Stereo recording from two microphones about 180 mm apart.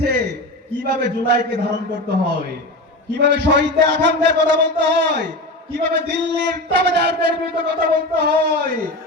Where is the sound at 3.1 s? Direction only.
80° right.